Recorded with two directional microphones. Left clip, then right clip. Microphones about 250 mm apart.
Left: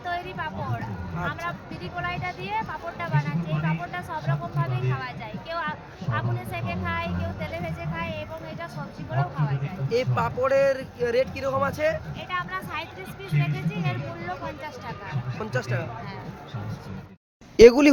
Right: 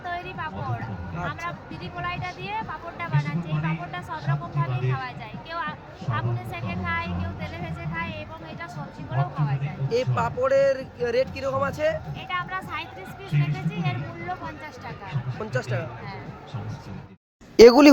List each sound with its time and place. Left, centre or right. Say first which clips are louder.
0.0 s a woman's voice: left 1 dB; centre
17.6 s speech: right 2 dB; centre